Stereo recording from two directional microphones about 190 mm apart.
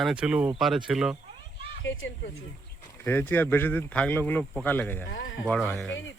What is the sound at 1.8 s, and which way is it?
Speech, 75° left (ahead or behind).